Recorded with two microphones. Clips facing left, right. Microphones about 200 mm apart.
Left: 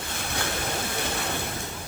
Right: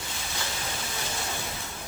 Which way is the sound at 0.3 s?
55° left (ahead or behind).